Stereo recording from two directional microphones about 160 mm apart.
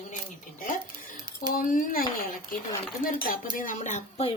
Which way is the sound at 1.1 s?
25° right (ahead or behind).